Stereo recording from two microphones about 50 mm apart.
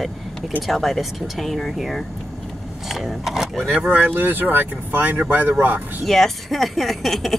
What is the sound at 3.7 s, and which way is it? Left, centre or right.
Speech, right.